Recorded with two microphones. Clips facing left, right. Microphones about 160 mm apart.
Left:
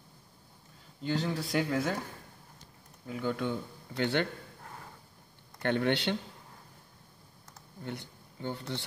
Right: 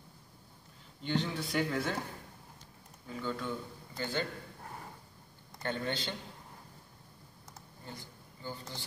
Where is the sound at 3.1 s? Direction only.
75° left (ahead or behind).